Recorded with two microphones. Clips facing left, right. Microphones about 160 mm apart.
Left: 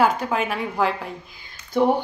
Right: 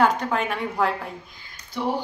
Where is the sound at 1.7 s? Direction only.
50° left (ahead or behind).